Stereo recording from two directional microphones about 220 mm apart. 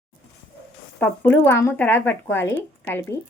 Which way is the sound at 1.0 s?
10° left (ahead or behind).